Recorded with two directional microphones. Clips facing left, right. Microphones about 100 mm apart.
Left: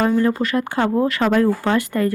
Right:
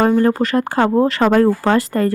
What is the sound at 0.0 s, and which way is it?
A woman's voice, 45° right (ahead or behind).